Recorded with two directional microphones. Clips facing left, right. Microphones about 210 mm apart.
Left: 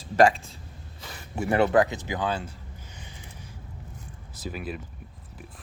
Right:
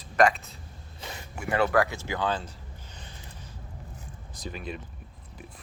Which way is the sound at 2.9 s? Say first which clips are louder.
Left 1 dB; 15° left (ahead or behind).